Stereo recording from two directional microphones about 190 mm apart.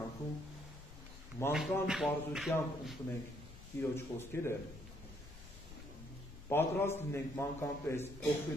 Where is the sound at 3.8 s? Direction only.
15° left (ahead or behind).